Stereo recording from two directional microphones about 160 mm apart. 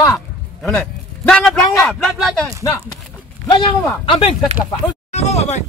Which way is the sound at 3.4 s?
30° left (ahead or behind).